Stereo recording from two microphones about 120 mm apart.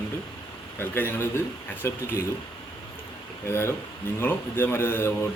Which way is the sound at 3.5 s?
20° left (ahead or behind).